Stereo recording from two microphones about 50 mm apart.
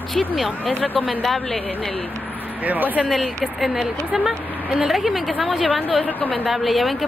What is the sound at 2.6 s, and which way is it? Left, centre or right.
Speech, right.